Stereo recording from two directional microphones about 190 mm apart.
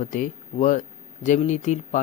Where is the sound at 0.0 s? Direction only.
45° left (ahead or behind).